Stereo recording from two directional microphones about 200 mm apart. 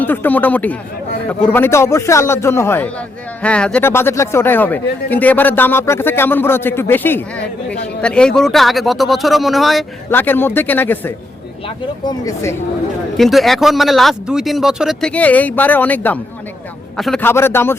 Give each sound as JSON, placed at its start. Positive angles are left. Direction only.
{"t": 0.0, "sound": "speech", "side_deg": 10}
{"t": 13.1, "sound": "speech", "side_deg": 0}